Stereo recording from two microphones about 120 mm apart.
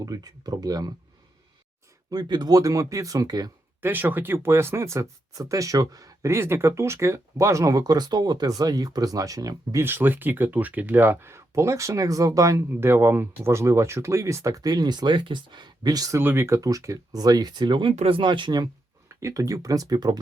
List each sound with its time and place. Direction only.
0.0 s speech: 30° right (ahead or behind)
2.0 s speech: 35° right (ahead or behind)
3.8 s speech: 15° right (ahead or behind)
9.8 s speech: 15° right (ahead or behind)
16.2 s speech: 20° right (ahead or behind); by 17.9 s 40° right (ahead or behind)
17.9 s speech: 50° right (ahead or behind)
19.0 s speech: 25° right (ahead or behind)